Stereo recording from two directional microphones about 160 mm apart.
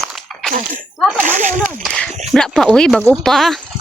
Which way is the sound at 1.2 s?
50° right (ahead or behind).